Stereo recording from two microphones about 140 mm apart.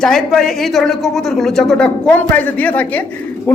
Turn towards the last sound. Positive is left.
turn(degrees=15)  # may be behind; listen again after turning